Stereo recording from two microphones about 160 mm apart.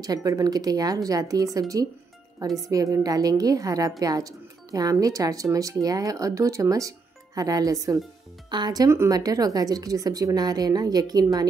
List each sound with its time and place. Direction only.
0.0 s speech: 20° right (ahead or behind)